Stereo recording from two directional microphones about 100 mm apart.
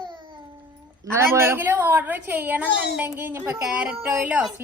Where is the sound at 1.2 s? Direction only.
25° right (ahead or behind).